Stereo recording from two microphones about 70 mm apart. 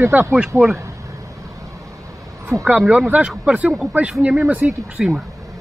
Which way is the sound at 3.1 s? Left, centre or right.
Centre.